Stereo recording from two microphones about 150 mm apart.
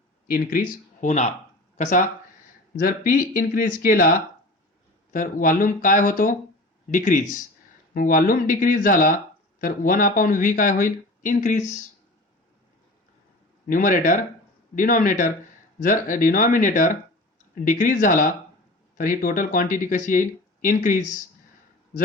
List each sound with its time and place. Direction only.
0.3 s speech: 75° left (ahead or behind)
1.0 s speech: 50° left (ahead or behind)
2.7 s speech: 70° left (ahead or behind)
5.1 s speech: 65° left (ahead or behind)
13.7 s speech: 60° left (ahead or behind)